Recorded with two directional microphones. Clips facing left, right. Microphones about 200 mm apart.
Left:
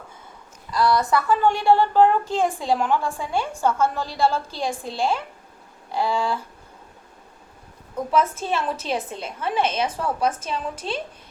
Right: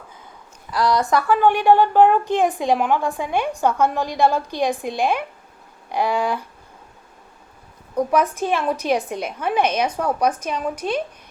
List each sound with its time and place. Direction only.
0.8 s a woman's voice: 15° right (ahead or behind)
8.1 s a woman's voice: 15° right (ahead or behind)